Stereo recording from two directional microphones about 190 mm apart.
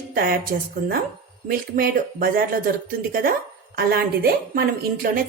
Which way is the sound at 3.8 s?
50° right (ahead or behind).